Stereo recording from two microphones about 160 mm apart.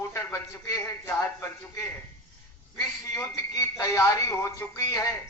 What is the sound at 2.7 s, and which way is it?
A man's voice, 20° left (ahead or behind).